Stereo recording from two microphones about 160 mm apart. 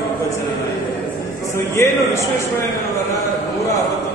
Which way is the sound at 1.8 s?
15° left (ahead or behind).